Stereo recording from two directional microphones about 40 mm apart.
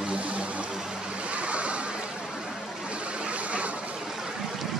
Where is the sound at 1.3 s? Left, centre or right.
Right.